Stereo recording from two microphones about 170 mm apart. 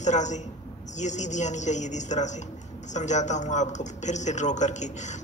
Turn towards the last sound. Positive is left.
turn(degrees=45)  # may be behind; listen again after turning